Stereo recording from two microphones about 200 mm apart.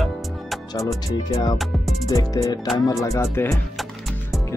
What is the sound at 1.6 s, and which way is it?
Music, centre (ahead or behind).